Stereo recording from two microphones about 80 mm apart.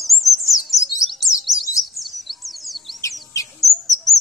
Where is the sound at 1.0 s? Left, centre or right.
Centre.